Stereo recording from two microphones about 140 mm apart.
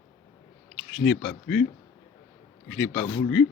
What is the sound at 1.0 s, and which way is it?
Speech, 10° left (ahead or behind).